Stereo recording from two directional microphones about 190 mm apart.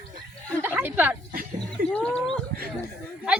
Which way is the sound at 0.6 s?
10° right (ahead or behind).